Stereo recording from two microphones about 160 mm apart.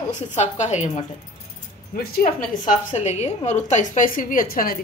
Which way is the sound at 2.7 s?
45° left (ahead or behind).